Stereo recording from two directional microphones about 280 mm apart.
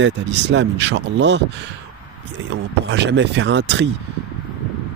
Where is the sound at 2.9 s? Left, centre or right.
Right.